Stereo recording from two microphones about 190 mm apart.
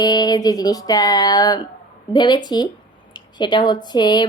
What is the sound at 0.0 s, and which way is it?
A woman's voice, 20° left (ahead or behind).